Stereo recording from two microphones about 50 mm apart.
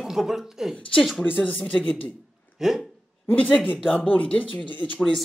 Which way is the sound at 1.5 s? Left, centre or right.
Left.